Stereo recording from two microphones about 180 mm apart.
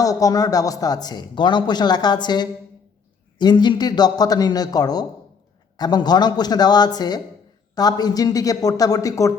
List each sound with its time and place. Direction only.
0.0 s speech: 20° left (ahead or behind)